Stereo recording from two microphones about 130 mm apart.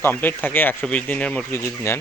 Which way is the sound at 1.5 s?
20° left (ahead or behind).